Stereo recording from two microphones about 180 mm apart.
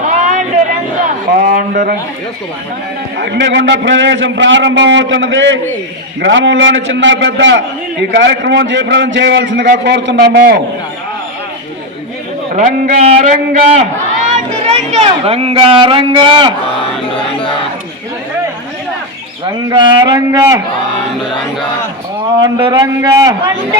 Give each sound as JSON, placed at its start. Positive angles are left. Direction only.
{"t": 0.3, "sound": "a sound", "side_deg": -45}
{"t": 3.2, "sound": "a man's voice", "side_deg": -80}
{"t": 8.1, "sound": "a man's voice", "side_deg": -75}
{"t": 12.5, "sound": "speech", "side_deg": -45}
{"t": 19.7, "sound": "a man's voice", "side_deg": -25}
{"t": 22.3, "sound": "a man's voice", "side_deg": -20}